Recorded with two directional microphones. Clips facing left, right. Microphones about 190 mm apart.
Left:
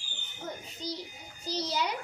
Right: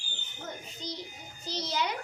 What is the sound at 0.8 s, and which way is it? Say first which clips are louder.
A child's voice: left 3 dB; 10° left (ahead or behind).